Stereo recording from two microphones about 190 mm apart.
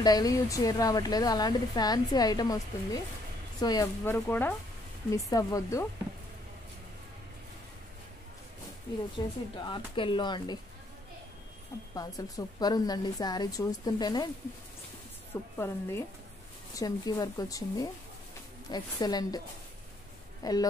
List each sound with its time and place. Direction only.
0.0 s a woman's voice: 20° left (ahead or behind)
9.2 s a woman's voice: 20° left (ahead or behind)
11.9 s a woman's voice: 20° left (ahead or behind)
15.5 s a woman's voice: 15° left (ahead or behind)
20.4 s a woman's voice: 20° left (ahead or behind)